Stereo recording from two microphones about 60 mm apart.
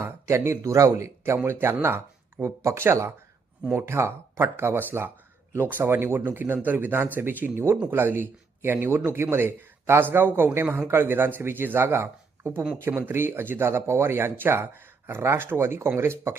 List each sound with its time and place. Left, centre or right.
0.0 s speech: right
1.5 s a man's voice: right